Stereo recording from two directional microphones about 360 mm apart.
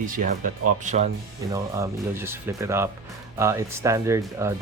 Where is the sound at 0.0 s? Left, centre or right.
Right.